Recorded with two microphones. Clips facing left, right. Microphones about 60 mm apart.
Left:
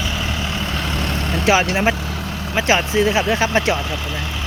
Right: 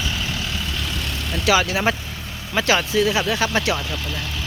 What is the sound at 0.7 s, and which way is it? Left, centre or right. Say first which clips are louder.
Vehicle: left 5 dB; left.